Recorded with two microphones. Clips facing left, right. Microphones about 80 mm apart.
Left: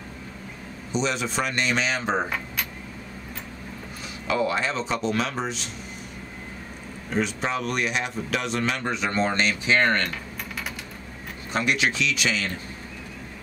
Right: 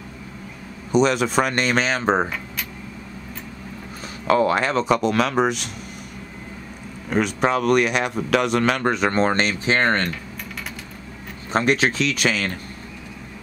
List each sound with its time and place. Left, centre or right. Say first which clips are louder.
0.9 s speech: right 8 dB; right
4.3 s speech: right 6 dB; right
7.1 s speech: right 6 dB; right
11.5 s speech: right 5 dB; right